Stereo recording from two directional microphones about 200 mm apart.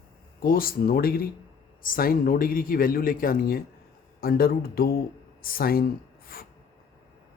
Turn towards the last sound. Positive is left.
turn(degrees=45)  # may be behind; listen again after turning